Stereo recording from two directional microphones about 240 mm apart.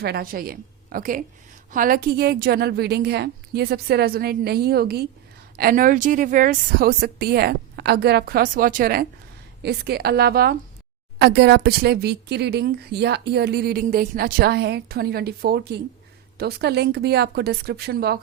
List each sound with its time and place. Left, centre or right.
0.0 s speech: right